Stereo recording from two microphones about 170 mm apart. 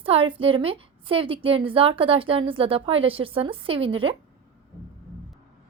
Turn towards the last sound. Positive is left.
turn(degrees=-30)  # may be behind; listen again after turning